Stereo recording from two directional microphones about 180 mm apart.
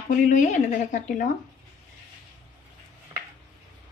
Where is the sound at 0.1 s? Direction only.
45° left (ahead or behind).